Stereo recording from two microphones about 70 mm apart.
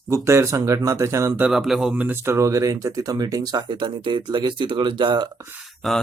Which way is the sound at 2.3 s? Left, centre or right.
Right.